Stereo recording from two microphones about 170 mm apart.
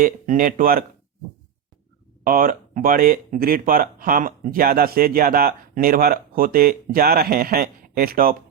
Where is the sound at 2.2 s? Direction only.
55° right (ahead or behind).